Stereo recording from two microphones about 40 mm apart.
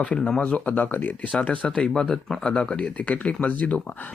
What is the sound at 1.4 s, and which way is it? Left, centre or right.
Speech, left.